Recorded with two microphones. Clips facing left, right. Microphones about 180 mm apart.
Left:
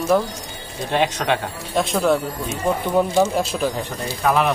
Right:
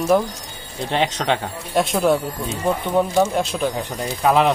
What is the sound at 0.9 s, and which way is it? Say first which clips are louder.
Speech: left 1 dB; 20° right (ahead or behind).